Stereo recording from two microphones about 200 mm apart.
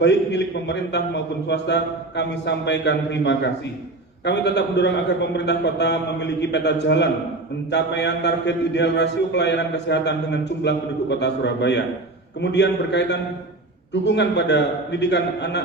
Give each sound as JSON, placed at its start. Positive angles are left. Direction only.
{"t": 0.0, "sound": "a man's voice", "side_deg": 60}